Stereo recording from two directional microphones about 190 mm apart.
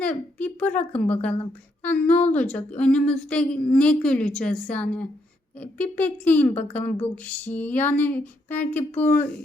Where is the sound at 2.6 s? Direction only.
5° left (ahead or behind).